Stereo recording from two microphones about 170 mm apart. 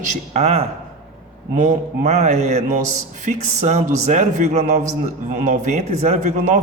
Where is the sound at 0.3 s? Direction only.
40° right (ahead or behind).